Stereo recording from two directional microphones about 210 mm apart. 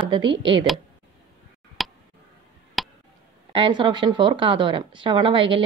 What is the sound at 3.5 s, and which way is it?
Speech, 25° right (ahead or behind).